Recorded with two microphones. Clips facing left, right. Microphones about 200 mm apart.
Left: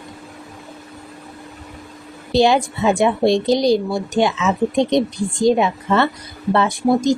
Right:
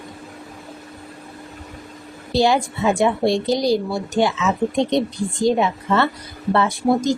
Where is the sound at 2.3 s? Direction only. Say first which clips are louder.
Left 3 dB; 20° left (ahead or behind).